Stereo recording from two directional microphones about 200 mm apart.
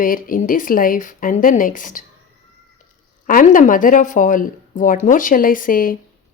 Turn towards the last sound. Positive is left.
turn(degrees=45)  # may be behind; listen again after turning